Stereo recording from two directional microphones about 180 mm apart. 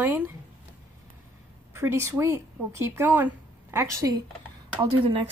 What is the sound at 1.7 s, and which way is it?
A woman's voice, 15° right (ahead or behind).